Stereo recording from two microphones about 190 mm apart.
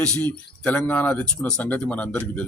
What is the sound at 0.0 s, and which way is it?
A man's voice, 5° left (ahead or behind).